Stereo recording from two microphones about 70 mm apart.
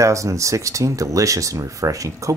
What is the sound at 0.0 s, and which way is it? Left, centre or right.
Speech, right.